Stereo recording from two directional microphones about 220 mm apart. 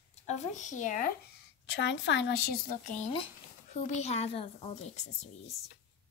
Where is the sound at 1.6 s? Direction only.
55° left (ahead or behind).